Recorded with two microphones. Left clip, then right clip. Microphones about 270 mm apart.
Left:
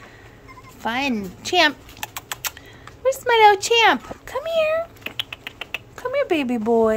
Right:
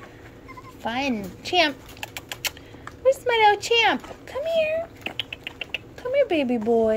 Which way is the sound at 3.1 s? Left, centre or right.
Centre.